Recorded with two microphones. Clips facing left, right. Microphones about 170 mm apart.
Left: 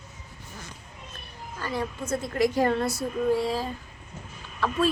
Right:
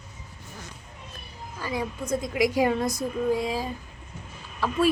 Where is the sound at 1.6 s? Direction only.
10° right (ahead or behind).